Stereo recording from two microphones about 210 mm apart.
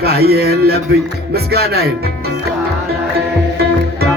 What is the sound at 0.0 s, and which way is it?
Music, 45° right (ahead or behind).